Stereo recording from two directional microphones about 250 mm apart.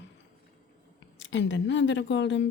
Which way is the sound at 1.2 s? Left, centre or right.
Left.